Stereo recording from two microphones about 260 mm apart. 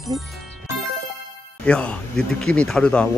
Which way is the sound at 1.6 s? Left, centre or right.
Centre.